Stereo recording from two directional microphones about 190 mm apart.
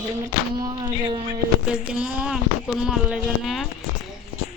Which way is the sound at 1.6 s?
5° right (ahead or behind).